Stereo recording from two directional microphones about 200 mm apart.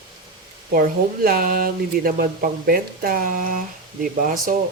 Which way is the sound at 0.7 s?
50° right (ahead or behind).